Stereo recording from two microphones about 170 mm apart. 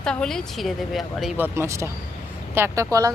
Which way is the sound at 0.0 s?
5° left (ahead or behind).